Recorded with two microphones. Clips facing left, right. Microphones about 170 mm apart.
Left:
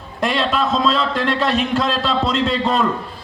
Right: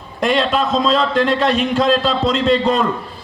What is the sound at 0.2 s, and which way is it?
A man's voice, centre (ahead or behind).